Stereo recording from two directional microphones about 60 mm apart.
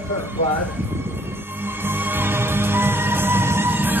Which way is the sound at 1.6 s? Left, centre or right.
Right.